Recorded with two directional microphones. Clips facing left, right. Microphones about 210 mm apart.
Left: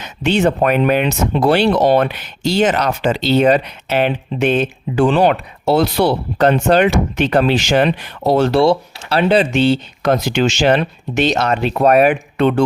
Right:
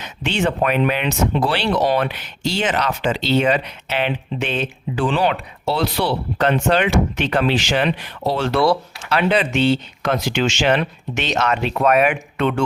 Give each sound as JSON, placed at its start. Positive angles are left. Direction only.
{"t": 0.0, "sound": "speech", "side_deg": 40}
{"t": 8.6, "sound": "speech", "side_deg": 30}